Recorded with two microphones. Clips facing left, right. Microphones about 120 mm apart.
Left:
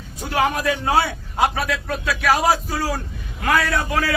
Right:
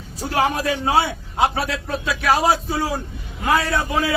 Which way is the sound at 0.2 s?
35° right (ahead or behind).